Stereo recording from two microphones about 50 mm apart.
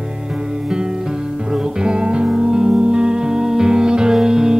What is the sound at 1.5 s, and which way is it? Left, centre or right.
Music, centre.